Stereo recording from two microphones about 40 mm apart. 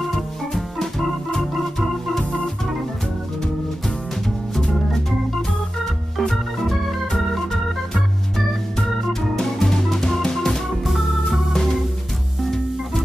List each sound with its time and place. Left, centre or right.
0.1 s organ: centre
4.6 s organ: centre
6.1 s organ: centre
9.4 s music: centre
10.9 s organ: centre